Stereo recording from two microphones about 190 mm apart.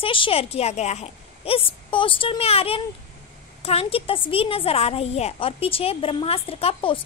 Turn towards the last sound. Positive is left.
turn(degrees=30)  # may be behind; listen again after turning